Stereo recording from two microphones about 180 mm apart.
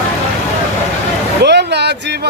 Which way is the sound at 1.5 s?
70° right (ahead or behind).